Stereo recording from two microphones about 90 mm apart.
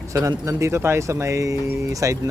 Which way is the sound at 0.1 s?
35° right (ahead or behind).